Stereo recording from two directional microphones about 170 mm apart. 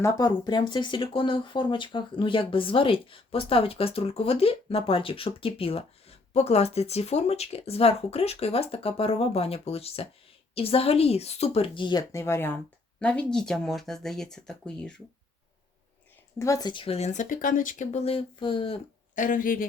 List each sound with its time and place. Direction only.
0.0 s speech: 20° left (ahead or behind); by 14.9 s 5° left (ahead or behind)
16.4 s speech: 20° left (ahead or behind)
19.1 s speech: 50° left (ahead or behind)